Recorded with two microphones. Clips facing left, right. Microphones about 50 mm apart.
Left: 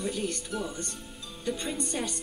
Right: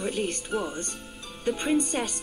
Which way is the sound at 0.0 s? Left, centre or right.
Right.